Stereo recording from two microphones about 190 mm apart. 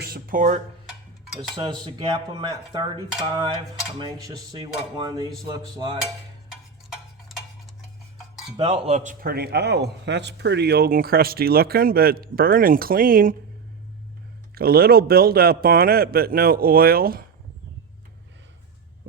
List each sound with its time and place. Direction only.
0.0 s speech: 50° right (ahead or behind)
1.4 s dishes: 25° right (ahead or behind)
6.5 s a sound: centre (ahead or behind)
8.5 s speech: 30° right (ahead or behind)
9.2 s speech: 55° right (ahead or behind)
14.5 s speech: 55° right (ahead or behind)